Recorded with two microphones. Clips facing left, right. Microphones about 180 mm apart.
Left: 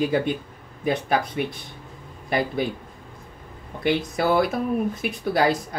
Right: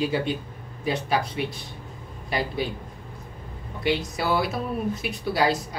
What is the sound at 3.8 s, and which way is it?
Speech, 55° left (ahead or behind).